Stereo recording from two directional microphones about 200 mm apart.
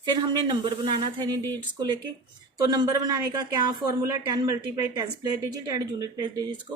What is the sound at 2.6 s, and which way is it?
A woman's voice, 20° right (ahead or behind).